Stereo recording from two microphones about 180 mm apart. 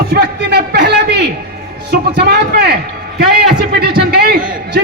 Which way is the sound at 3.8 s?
60° right (ahead or behind).